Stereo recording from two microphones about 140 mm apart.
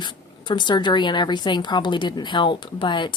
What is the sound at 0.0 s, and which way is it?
A woman's voice, 35° left (ahead or behind).